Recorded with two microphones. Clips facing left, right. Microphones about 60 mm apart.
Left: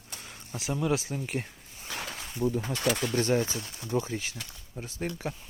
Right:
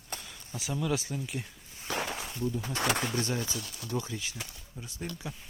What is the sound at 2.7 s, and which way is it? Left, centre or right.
Speech, right.